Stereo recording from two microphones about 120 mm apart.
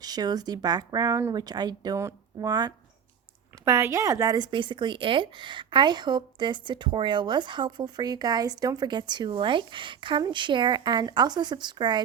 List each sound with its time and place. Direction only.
0.0 s a woman's voice: 35° right (ahead or behind)
2.0 s speech: 25° right (ahead or behind)
2.5 s a woman's voice: 35° right (ahead or behind)
3.6 s speech: 20° right (ahead or behind)
4.5 s a woman's voice: 40° right (ahead or behind)